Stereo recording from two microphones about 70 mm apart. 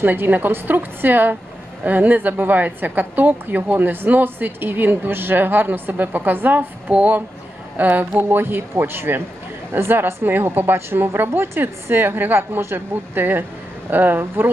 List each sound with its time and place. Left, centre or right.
0.0 s a woman's voice: right